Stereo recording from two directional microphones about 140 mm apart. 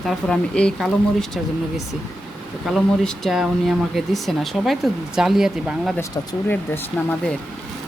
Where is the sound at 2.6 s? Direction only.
Centre (ahead or behind).